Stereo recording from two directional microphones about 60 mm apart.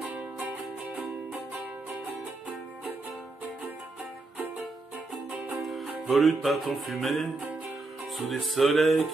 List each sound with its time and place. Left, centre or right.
0.1 s music: right
5.6 s music: centre